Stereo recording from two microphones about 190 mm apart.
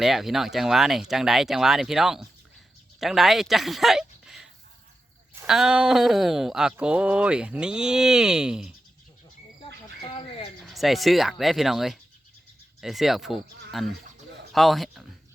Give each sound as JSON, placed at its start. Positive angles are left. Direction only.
{"t": 0.0, "sound": "speech", "side_deg": 0}
{"t": 10.0, "sound": "a sound", "side_deg": 30}
{"t": 10.6, "sound": "speech", "side_deg": 0}